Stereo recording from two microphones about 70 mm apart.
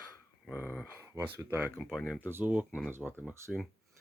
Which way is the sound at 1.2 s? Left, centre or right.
Right.